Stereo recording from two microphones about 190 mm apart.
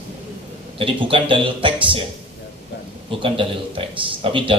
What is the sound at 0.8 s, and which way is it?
A man's voice, 25° right (ahead or behind).